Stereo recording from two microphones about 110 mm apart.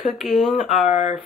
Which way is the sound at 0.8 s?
85° left.